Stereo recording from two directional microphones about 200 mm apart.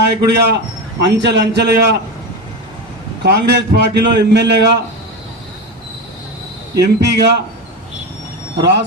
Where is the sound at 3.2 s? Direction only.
55° right (ahead or behind).